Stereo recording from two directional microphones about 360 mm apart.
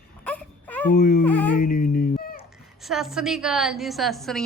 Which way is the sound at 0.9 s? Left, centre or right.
Left.